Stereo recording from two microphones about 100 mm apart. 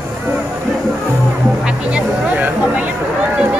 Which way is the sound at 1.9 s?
15° right (ahead or behind).